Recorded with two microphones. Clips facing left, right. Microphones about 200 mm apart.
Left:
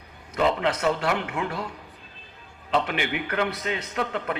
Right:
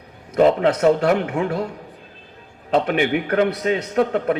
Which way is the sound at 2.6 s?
50° right (ahead or behind).